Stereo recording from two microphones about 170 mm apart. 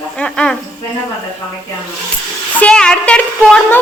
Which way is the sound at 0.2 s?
5° left (ahead or behind).